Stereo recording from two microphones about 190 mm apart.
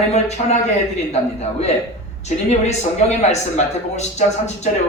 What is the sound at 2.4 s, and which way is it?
Speech, 35° left (ahead or behind).